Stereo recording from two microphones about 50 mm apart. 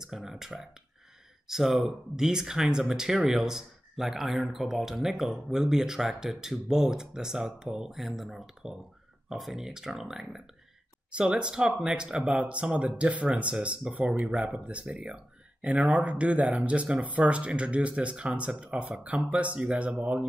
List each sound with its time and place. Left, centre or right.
0.0 s speech: centre; by 20.2 s right